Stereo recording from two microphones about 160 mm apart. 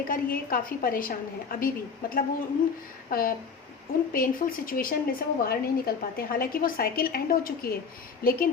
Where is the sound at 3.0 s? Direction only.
65° left (ahead or behind).